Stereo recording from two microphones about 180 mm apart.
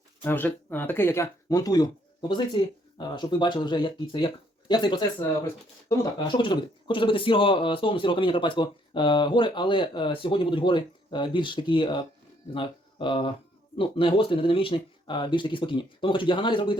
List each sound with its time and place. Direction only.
0.2 s a man's voice: 10° left (ahead or behind); by 16.7 s 25° left (ahead or behind)